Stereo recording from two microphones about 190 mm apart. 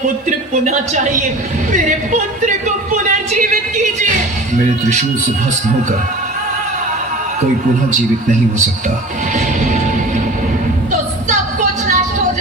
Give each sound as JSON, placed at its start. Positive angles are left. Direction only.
{"t": 0.3, "sound": "speech", "side_deg": -40}
{"t": 9.3, "sound": "music", "side_deg": -45}
{"t": 11.3, "sound": "music", "side_deg": -40}